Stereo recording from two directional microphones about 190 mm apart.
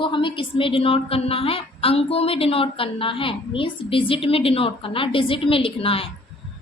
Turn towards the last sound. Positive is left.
turn(degrees=30)  # may be behind; listen again after turning